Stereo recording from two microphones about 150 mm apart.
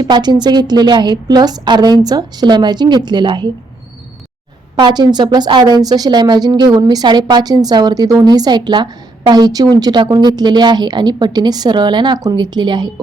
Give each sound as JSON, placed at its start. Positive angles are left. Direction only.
{"t": 0.0, "sound": "a woman's voice", "side_deg": -30}
{"t": 4.8, "sound": "a woman's voice", "side_deg": -30}